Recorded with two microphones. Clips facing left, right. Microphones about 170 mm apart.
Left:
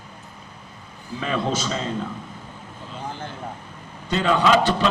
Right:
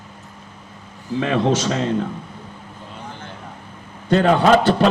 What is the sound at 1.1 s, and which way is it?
Speech, 80° right.